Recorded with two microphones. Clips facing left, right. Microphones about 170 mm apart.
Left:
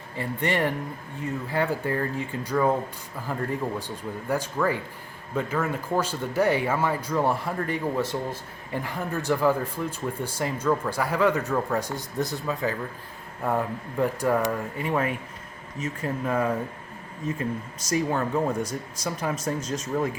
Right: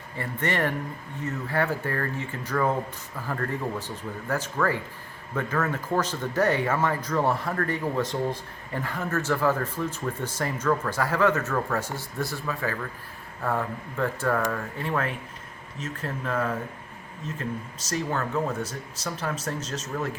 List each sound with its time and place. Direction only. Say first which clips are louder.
0.2 s speech: left 2 dB; 15° left (ahead or behind)
17.8 s speech: left 4 dB; 10° left (ahead or behind)